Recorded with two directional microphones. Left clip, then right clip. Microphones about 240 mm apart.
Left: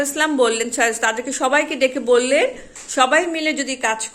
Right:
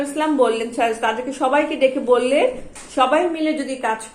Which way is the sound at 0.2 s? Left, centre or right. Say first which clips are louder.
Even; left.